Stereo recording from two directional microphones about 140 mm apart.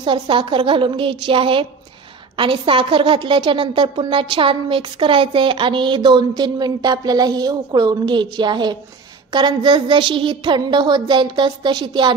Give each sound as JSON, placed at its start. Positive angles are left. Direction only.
{"t": 0.0, "sound": "a woman's voice", "side_deg": -35}